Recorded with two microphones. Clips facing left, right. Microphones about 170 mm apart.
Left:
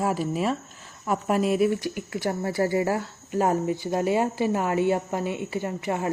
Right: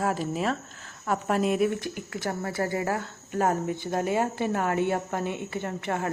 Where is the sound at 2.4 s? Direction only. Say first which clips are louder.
Left 5 dB; 15° left (ahead or behind).